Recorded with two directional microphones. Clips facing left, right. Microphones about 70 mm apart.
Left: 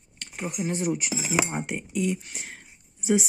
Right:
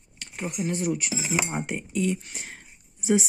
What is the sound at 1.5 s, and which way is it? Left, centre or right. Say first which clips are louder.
Speech: right 1 dB; centre.